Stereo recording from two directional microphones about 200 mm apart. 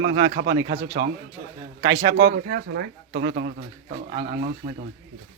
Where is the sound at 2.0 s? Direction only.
50° right (ahead or behind).